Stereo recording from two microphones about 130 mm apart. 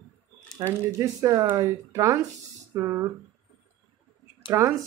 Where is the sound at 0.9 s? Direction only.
25° right (ahead or behind).